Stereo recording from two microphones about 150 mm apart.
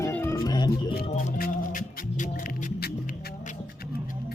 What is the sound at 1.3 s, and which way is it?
Music, 70° left (ahead or behind).